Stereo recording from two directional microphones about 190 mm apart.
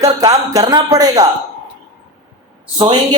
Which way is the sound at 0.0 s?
20° right (ahead or behind).